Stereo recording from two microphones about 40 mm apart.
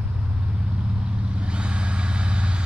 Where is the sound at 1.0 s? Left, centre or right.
Right.